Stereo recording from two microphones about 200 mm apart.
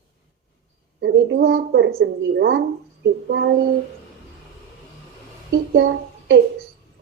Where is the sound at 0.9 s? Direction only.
65° right (ahead or behind).